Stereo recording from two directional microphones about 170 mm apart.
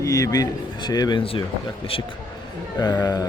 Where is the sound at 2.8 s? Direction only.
20° left (ahead or behind).